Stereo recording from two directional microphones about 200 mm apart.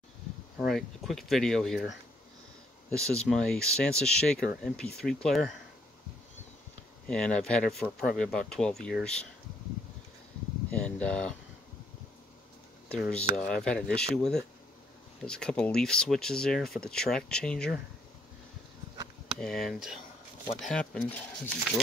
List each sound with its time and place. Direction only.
0.6 s speech: centre (ahead or behind)
7.1 s speech: 5° left (ahead or behind)
10.8 s speech: 5° left (ahead or behind)
12.9 s speech: 5° left (ahead or behind)
19.4 s speech: centre (ahead or behind)